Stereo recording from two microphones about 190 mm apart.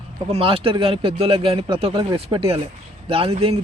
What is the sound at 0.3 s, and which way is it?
Speech, 30° right (ahead or behind).